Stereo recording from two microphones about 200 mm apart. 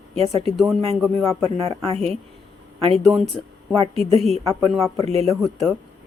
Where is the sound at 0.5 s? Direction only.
Centre (ahead or behind).